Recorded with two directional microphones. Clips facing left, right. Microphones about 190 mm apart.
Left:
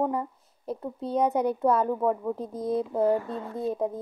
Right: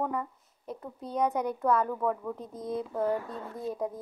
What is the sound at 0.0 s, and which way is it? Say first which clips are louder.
Speech: left 5 dB; 30° left (ahead or behind).